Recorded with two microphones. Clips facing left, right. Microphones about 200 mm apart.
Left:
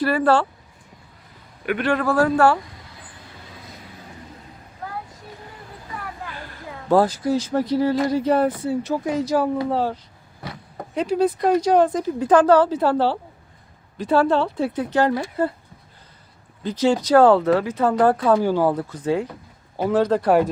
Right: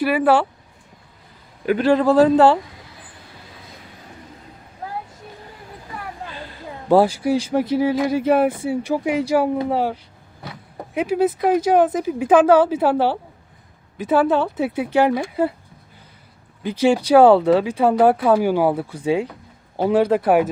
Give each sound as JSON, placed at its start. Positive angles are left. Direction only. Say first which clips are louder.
{"t": 0.0, "sound": "speech", "louder": "right 2 dB", "side_deg": -5}
{"t": 1.6, "sound": "a man's voice", "louder": "right 5 dB", "side_deg": -30}
{"t": 2.0, "sound": "speech", "louder": "right 4 dB", "side_deg": -20}
{"t": 6.2, "sound": "a sound", "louder": "right 2 dB", "side_deg": -25}
{"t": 6.9, "sound": "speech", "louder": "right 2 dB", "side_deg": -10}
{"t": 16.6, "sound": "speech", "louder": "right 2 dB", "side_deg": -10}